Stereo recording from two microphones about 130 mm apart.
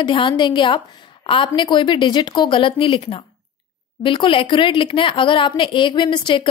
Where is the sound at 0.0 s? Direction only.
40° left (ahead or behind).